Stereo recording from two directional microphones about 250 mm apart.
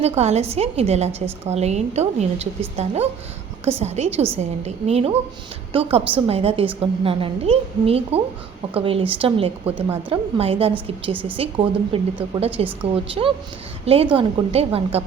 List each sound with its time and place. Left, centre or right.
0.0 s a woman's voice: right